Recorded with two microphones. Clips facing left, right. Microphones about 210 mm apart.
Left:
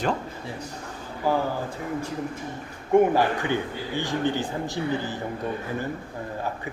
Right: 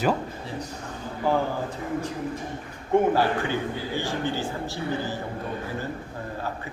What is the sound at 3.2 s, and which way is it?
Speech, 15° left (ahead or behind).